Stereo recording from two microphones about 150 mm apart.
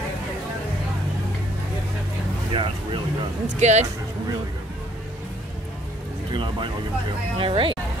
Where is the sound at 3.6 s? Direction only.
50° right (ahead or behind).